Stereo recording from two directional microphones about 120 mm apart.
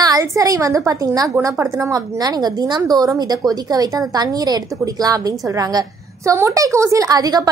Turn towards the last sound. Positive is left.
turn(degrees=-30)  # may be behind; listen again after turning